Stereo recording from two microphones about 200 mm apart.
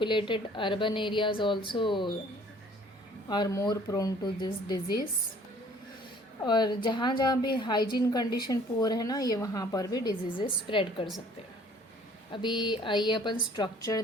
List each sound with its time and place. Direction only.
0.0 s a woman's voice: 25° left (ahead or behind)
3.2 s a woman's voice: 20° left (ahead or behind)
6.4 s a woman's voice: 20° left (ahead or behind)
12.3 s a woman's voice: 25° left (ahead or behind)